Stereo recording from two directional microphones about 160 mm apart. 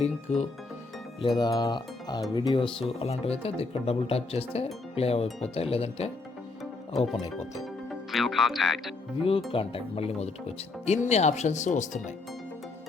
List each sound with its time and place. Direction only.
0.0 s speech: 45° left (ahead or behind)
1.4 s speech: 25° left (ahead or behind)
8.1 s speech: centre (ahead or behind)
9.5 s speech: 35° left (ahead or behind)